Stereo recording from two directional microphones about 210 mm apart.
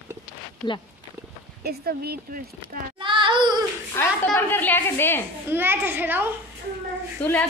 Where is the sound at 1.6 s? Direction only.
50° right (ahead or behind).